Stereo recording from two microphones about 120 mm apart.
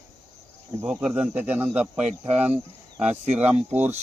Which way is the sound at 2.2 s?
65° right (ahead or behind).